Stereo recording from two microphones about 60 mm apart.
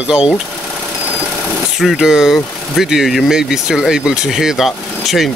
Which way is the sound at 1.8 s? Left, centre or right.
Centre.